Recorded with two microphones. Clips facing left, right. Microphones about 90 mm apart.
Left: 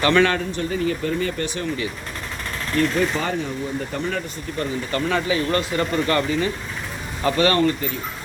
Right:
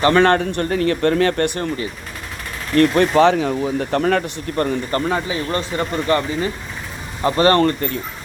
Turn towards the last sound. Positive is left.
turn(degrees=-40)  # may be behind; listen again after turning